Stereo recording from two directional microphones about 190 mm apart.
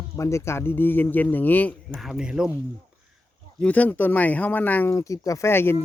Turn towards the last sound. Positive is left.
turn(degrees=10)  # may be behind; listen again after turning